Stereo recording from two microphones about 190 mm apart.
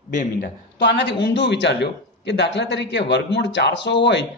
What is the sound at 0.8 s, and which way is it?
A man's voice, 65° left (ahead or behind).